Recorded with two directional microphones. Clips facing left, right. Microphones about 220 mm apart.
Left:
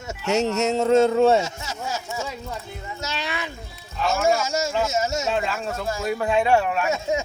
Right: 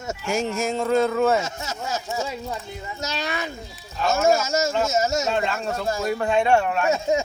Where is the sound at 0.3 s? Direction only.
70° left (ahead or behind).